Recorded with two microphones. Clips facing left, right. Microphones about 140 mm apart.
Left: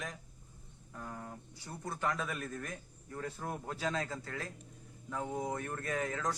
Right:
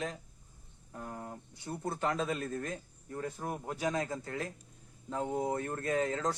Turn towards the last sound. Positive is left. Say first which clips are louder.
# right 4 dB
turn(degrees=-25)  # may be behind; listen again after turning